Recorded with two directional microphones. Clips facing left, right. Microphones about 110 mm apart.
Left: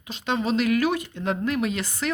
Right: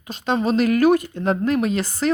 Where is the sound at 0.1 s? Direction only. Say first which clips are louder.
Right 4 dB; 45° right (ahead or behind).